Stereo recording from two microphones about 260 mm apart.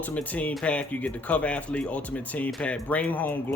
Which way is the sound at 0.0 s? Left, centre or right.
Centre.